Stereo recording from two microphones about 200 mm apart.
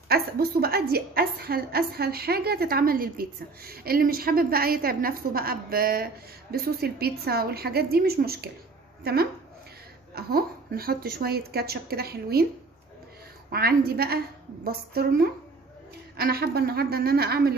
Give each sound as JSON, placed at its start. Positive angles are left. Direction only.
{"t": 0.1, "sound": "a woman's voice", "side_deg": -50}
{"t": 13.5, "sound": "a woman's voice", "side_deg": -50}